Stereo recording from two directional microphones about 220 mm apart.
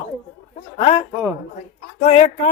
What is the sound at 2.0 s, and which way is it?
Speech, 30° left (ahead or behind).